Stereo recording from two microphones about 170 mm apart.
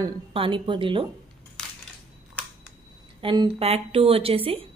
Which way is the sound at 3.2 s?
30° right (ahead or behind).